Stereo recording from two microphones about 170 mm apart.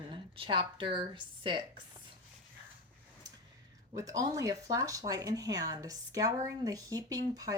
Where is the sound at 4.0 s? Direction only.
20° right (ahead or behind).